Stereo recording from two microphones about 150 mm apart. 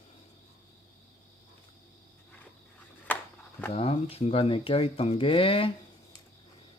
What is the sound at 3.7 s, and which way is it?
Speech, 40° left (ahead or behind).